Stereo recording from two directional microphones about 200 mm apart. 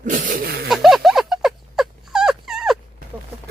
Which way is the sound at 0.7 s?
Centre (ahead or behind).